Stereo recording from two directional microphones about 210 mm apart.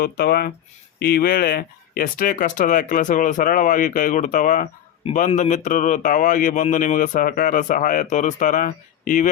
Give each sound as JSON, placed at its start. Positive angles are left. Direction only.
{"t": 0.0, "sound": "speech", "side_deg": 45}